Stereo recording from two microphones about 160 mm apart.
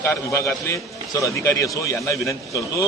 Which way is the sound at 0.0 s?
20° left (ahead or behind).